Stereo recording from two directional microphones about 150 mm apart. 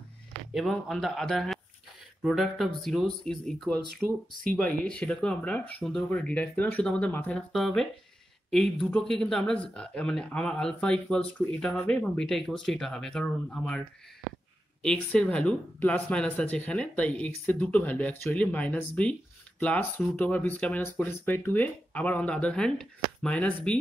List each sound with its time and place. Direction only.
0.5 s speech: centre (ahead or behind)
4.4 s speech: 70° right (ahead or behind)
4.6 s speech: 5° left (ahead or behind)